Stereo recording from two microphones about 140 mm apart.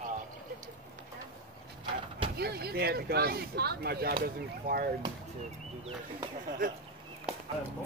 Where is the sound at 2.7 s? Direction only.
90° right.